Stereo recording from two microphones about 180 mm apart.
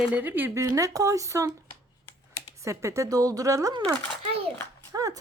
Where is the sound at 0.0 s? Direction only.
10° right (ahead or behind).